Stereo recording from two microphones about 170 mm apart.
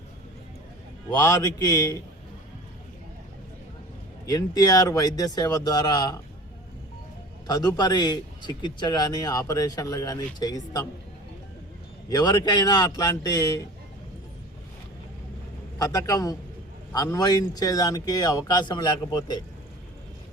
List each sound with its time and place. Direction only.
1.2 s a man's voice: 20° left (ahead or behind)
4.3 s a man's voice: 20° left (ahead or behind)
7.4 s a man's voice: 25° left (ahead or behind)
12.0 s a man's voice: 20° left (ahead or behind)
15.8 s a man's voice: 20° left (ahead or behind)